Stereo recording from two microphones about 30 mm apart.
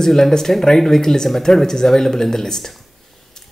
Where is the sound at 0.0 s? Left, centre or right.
Centre.